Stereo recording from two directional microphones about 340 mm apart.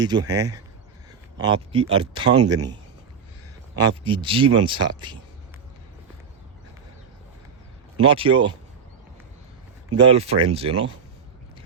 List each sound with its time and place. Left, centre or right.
0.0 s speech: centre
3.8 s speech: centre
8.0 s speech: centre
10.1 s speech: centre